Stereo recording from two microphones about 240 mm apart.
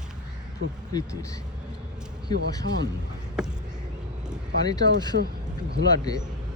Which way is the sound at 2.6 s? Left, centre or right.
Right.